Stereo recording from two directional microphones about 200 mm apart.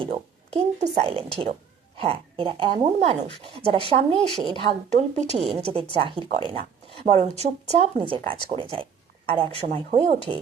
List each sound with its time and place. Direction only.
0.0 s a woman's voice: 30° right (ahead or behind)